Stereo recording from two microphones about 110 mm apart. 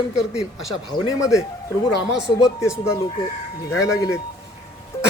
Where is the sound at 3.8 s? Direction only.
30° left (ahead or behind).